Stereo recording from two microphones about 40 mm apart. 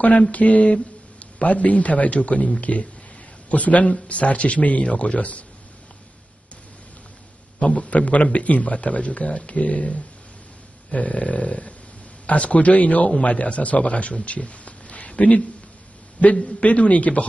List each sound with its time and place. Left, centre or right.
0.3 s a man's voice: left
7.5 s a man's voice: left
16.3 s a man's voice: centre
16.6 s a man's voice: left